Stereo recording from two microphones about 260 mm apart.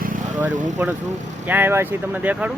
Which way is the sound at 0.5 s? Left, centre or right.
Right.